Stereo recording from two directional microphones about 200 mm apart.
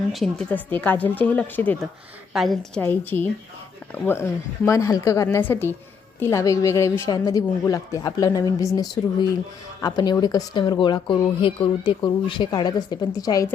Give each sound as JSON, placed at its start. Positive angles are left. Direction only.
{"t": 0.1, "sound": "a woman's voice", "side_deg": 0}
{"t": 2.8, "sound": "a woman's voice", "side_deg": 10}